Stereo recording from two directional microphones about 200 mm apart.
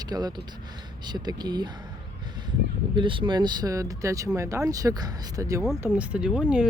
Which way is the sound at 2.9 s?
25° right (ahead or behind).